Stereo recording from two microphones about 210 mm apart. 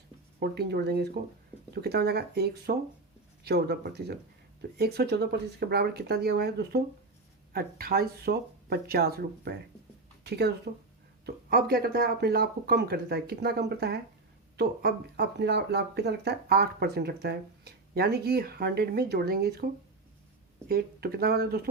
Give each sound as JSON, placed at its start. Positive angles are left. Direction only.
{"t": 0.3, "sound": "speech", "side_deg": -50}
{"t": 11.5, "sound": "speech", "side_deg": -45}